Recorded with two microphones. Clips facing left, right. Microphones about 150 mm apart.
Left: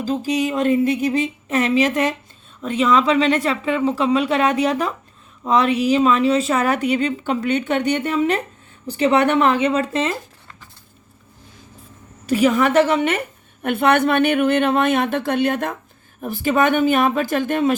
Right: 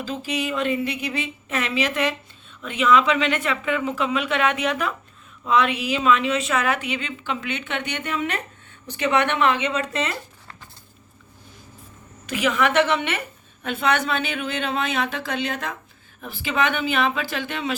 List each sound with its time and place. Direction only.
0.0 s speech: 40° left (ahead or behind)
12.2 s a woman's voice: 35° left (ahead or behind)